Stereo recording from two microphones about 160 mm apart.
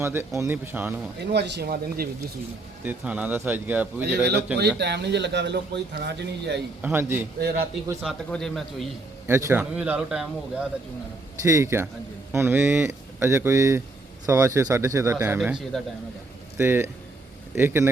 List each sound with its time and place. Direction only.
0.0 s speech: 15° right (ahead or behind)
1.2 s speech: 90° right
2.8 s speech: 10° right (ahead or behind)
4.0 s speech: 90° right
6.8 s speech: 15° right (ahead or behind)
8.0 s a man's voice: 5° left (ahead or behind)
9.2 s speech: 15° right (ahead or behind)
11.4 s speech: 20° right (ahead or behind)
15.4 s a man's voice: 5° right (ahead or behind)
16.6 s speech: 15° right (ahead or behind)